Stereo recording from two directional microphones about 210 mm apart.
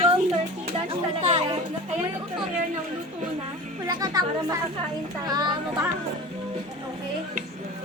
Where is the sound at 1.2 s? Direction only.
30° right (ahead or behind).